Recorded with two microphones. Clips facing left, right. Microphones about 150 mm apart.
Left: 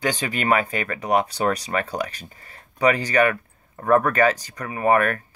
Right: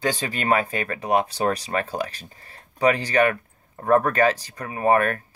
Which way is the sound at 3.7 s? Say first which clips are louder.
Left 1 dB; 30° right (ahead or behind).